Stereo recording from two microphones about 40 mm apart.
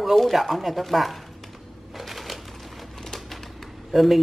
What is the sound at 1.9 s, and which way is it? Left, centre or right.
Typewriter, centre.